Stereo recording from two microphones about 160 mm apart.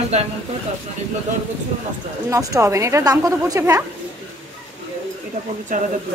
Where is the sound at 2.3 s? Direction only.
20° right (ahead or behind).